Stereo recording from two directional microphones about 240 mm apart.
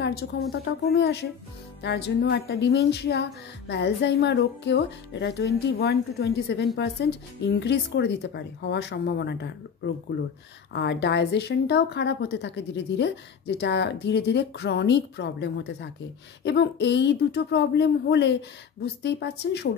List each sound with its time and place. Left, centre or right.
0.0 s a woman's voice: left
10.7 s a woman's voice: left